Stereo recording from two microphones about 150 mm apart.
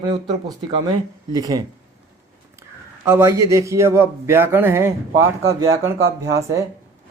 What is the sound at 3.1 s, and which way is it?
A man's voice, 20° right (ahead or behind).